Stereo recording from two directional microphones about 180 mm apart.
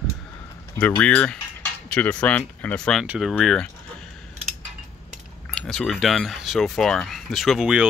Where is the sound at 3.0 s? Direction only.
10° right (ahead or behind).